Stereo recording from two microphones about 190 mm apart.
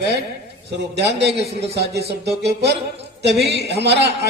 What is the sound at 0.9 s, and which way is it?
A man's voice, 60° right (ahead or behind).